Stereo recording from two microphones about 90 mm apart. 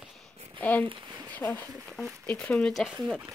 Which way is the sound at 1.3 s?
20° left (ahead or behind).